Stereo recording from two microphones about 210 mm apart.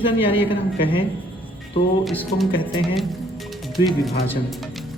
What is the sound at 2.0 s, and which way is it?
Speech, centre (ahead or behind).